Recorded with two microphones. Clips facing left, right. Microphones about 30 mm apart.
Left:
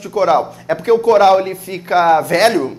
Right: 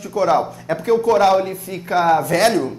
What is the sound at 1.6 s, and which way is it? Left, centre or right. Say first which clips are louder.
Speech: left 4 dB; left.